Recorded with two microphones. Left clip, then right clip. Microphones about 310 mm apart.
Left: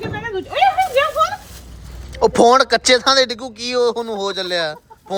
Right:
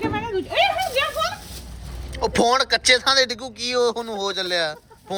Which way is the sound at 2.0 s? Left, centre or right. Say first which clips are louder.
Left 7 dB; centre.